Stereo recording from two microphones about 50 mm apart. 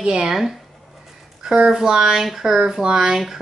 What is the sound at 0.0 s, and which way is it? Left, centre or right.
Speech, centre.